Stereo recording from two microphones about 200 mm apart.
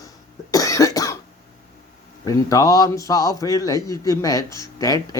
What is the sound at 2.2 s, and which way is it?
Speech, 15° left (ahead or behind).